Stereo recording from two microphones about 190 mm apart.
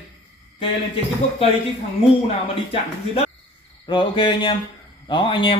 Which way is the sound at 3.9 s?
25° left (ahead or behind).